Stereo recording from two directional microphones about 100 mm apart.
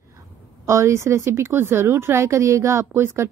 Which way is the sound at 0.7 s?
30° right (ahead or behind).